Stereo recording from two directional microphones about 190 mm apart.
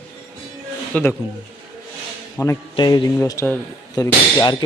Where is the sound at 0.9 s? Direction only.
5° left (ahead or behind).